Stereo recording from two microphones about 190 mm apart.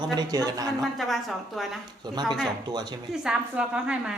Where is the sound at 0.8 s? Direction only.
Centre (ahead or behind).